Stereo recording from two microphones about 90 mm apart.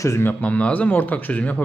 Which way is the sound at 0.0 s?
30° left (ahead or behind).